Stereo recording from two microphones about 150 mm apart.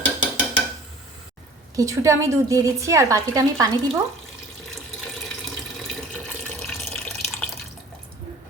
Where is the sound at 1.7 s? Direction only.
20° right (ahead or behind).